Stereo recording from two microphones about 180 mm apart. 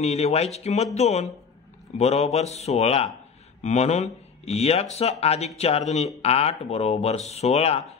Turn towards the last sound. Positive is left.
turn(degrees=35)  # may be behind; listen again after turning